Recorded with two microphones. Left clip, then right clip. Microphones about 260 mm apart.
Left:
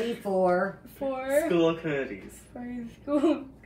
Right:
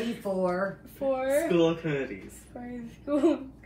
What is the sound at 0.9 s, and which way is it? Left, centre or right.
A woman's voice, centre.